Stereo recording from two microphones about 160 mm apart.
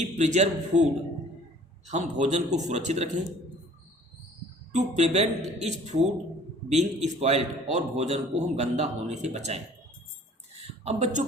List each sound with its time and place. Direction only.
0.0 s a man's voice: 45° right (ahead or behind)
1.9 s a man's voice: 45° right (ahead or behind)
4.7 s a man's voice: 45° right (ahead or behind)
10.6 s speech: 45° right (ahead or behind)